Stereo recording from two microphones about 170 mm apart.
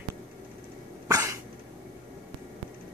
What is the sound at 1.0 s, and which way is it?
Cough, 20° right (ahead or behind).